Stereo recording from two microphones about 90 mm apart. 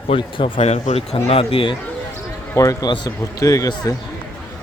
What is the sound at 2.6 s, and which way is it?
Speech, 40° left (ahead or behind).